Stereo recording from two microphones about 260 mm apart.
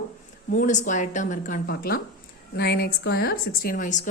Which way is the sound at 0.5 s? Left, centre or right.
Left.